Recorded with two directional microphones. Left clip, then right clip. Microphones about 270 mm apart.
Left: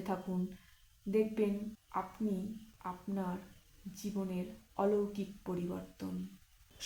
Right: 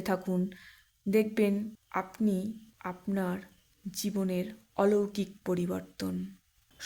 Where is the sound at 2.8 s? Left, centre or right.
Right.